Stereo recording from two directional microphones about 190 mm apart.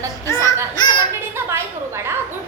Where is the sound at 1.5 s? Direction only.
15° right (ahead or behind).